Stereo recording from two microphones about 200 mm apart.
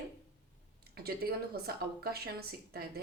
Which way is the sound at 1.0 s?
50° right (ahead or behind).